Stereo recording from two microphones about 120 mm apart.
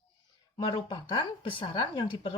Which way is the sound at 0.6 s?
40° left (ahead or behind).